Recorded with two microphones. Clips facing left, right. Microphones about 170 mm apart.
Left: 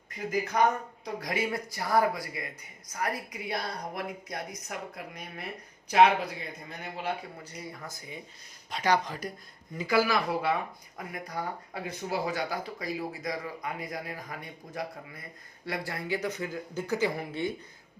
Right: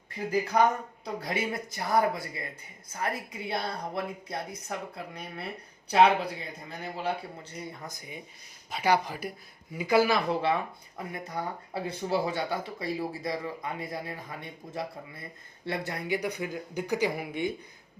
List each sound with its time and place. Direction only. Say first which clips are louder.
0.1 s speech: right 3 dB; 30° right (ahead or behind)
7.9 s speech: even; 20° right (ahead or behind)
9.7 s speech: right 2 dB; 20° right (ahead or behind)